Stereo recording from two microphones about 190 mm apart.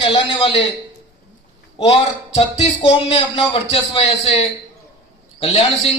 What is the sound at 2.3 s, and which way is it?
A man's voice, 35° left (ahead or behind).